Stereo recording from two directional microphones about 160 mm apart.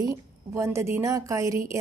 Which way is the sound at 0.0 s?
15° right (ahead or behind).